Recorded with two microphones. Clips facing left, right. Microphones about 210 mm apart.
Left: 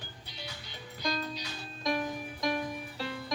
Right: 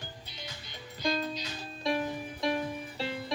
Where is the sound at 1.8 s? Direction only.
25° right (ahead or behind).